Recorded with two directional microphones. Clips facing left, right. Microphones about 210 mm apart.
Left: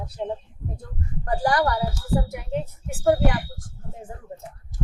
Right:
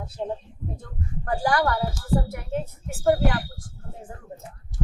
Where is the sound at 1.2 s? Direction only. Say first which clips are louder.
Left 1 dB; 15° left (ahead or behind).